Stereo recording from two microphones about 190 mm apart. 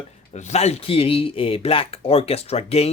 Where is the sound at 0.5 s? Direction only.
35° left (ahead or behind).